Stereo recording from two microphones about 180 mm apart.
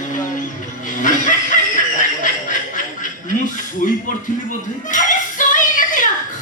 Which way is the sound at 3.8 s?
50° left (ahead or behind).